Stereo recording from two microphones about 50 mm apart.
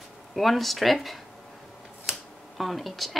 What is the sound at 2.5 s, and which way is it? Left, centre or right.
Speech, centre.